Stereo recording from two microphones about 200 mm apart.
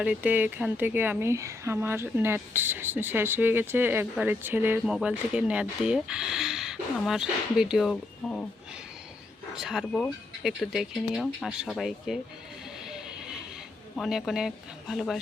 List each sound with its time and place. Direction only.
0.0 s speech: 5° right (ahead or behind)
9.6 s speech: centre (ahead or behind)
12.9 s a sound: 5° right (ahead or behind)
13.9 s speech: centre (ahead or behind)